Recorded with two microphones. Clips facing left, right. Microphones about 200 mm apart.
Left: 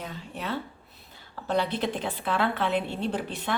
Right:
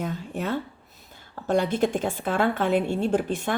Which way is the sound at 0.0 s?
45° right (ahead or behind).